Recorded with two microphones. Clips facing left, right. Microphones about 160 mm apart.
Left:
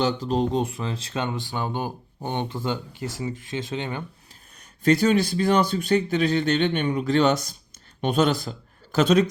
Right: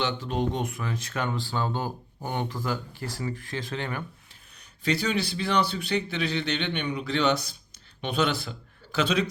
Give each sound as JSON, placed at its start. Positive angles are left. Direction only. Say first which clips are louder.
{"t": 0.0, "sound": "speech", "louder": "left 5 dB", "side_deg": 35}
{"t": 4.8, "sound": "a man's voice", "louder": "left 8 dB", "side_deg": 50}